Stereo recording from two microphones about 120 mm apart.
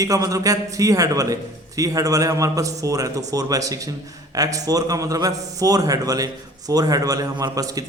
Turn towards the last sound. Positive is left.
turn(degrees=-30)  # may be behind; listen again after turning